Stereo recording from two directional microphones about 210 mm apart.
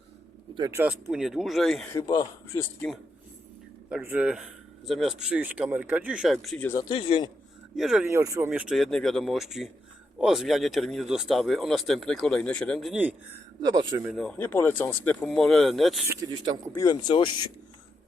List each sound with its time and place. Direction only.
0.5 s speech: 15° right (ahead or behind); by 2.6 s 15° left (ahead or behind)
3.8 s speech: 5° right (ahead or behind); by 6.8 s 10° left (ahead or behind)
6.8 s speech: 25° left (ahead or behind)
7.8 s speech: centre (ahead or behind)
13.6 s speech: 20° right (ahead or behind)
14.2 s speech: 5° left (ahead or behind)
16.0 s speech: 20° right (ahead or behind)
16.7 s speech: 20° left (ahead or behind)